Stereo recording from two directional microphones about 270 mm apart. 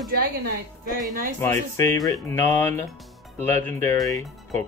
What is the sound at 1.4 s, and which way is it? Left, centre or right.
Speech, centre.